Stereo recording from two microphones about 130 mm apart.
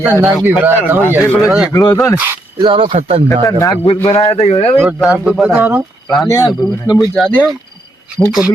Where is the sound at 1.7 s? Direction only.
30° left (ahead or behind).